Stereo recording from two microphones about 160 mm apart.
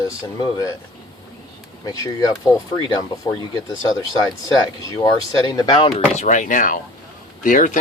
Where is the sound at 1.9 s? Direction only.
25° left (ahead or behind).